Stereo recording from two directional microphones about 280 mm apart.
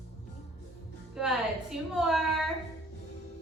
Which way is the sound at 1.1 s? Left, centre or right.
Centre.